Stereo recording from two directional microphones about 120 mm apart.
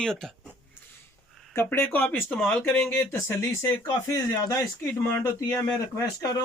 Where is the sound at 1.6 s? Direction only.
20° left (ahead or behind).